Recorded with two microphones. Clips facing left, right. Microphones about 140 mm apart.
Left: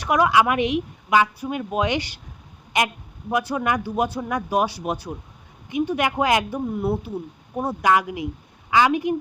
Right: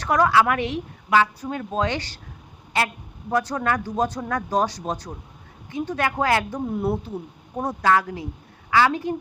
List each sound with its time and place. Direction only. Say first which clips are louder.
0.0 s speech: even; 10° left (ahead or behind)